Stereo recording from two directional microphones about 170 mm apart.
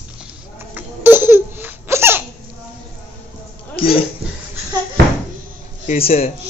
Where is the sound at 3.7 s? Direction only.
35° left (ahead or behind).